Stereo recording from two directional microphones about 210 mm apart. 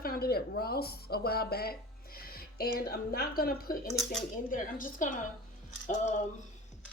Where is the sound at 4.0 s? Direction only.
Centre (ahead or behind).